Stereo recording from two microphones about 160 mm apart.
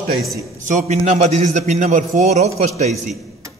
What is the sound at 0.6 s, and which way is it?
A man's voice, 50° right (ahead or behind).